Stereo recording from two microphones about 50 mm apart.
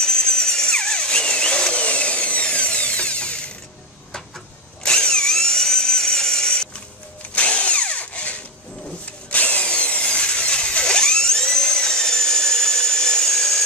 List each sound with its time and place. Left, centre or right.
0.0 s tools: centre
4.8 s drill: centre